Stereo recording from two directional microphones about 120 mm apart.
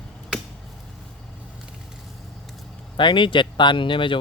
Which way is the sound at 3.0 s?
40° left (ahead or behind).